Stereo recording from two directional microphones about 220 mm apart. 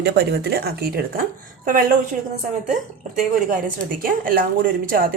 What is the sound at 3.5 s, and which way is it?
A woman's voice, 40° right (ahead or behind).